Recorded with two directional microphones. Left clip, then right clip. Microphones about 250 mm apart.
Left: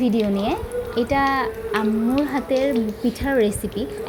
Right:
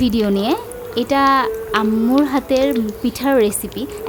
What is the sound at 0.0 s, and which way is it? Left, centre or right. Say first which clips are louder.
A woman's voice: right 3 dB; centre.